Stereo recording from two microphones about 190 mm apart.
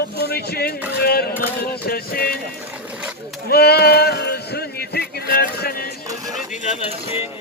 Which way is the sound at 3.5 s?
55° left (ahead or behind).